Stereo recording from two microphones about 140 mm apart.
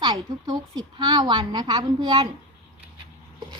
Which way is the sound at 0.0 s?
30° right (ahead or behind).